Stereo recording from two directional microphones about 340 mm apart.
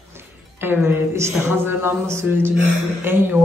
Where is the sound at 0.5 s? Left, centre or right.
Centre.